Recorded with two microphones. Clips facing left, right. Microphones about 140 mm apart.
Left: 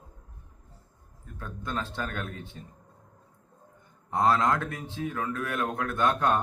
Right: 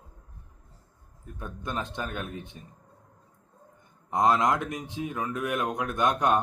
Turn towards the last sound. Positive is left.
turn(degrees=-15)  # may be behind; listen again after turning